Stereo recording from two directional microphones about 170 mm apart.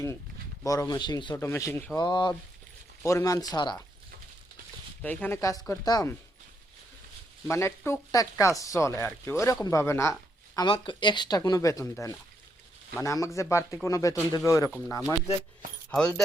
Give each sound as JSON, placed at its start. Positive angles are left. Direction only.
{"t": 0.6, "sound": "speech", "side_deg": 20}
{"t": 5.0, "sound": "speech", "side_deg": 10}
{"t": 7.4, "sound": "speech", "side_deg": 15}
{"t": 15.9, "sound": "speech", "side_deg": 5}